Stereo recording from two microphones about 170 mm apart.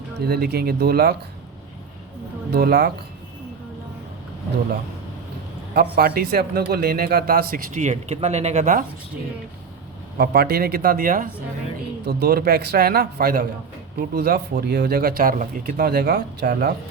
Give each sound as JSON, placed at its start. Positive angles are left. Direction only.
{"t": 0.2, "sound": "a man's voice", "side_deg": -65}
{"t": 2.5, "sound": "a man's voice", "side_deg": -65}
{"t": 5.7, "sound": "a man's voice", "side_deg": -65}
{"t": 10.2, "sound": "a man's voice", "side_deg": -65}
{"t": 12.0, "sound": "a man's voice", "side_deg": -65}